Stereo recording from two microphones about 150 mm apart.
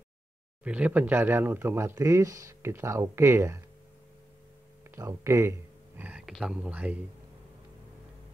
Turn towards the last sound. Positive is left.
turn(degrees=-10)  # may be behind; listen again after turning